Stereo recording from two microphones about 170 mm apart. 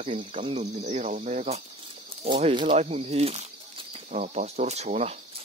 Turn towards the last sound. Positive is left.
turn(degrees=-40)  # may be behind; listen again after turning